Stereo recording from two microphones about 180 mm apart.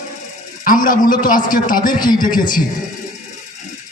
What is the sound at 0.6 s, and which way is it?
A man's voice, 50° left (ahead or behind).